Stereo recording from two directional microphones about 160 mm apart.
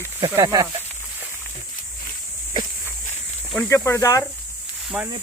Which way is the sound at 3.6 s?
15° left (ahead or behind).